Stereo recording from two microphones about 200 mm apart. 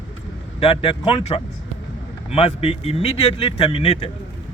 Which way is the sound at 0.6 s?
30° left (ahead or behind).